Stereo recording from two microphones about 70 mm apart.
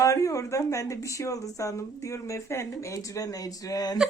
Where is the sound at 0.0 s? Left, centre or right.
Left.